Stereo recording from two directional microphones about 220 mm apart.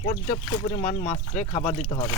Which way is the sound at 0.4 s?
20° left (ahead or behind).